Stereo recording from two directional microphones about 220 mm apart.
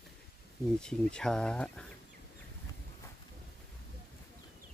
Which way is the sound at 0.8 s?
5° left (ahead or behind).